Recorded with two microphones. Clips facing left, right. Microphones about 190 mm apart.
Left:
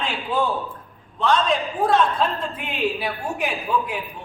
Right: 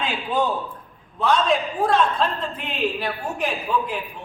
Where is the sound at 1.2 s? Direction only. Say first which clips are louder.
Even; 5° right (ahead or behind).